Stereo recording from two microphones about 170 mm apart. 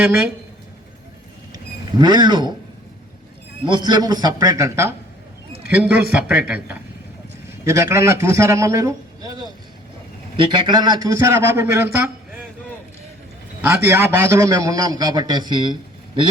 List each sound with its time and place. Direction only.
1.5 s vehicle: 25° right (ahead or behind)
3.7 s a man's voice: 25° right (ahead or behind)
13.6 s a man's voice: 10° right (ahead or behind); by 16.3 s 30° right (ahead or behind)